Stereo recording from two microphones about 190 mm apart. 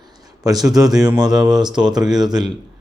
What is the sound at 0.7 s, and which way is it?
Speech, 20° right (ahead or behind).